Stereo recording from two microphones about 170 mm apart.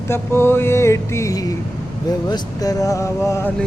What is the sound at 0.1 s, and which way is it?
Speech, 15° left (ahead or behind).